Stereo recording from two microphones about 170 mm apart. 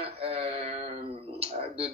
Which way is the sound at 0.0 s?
35° right (ahead or behind).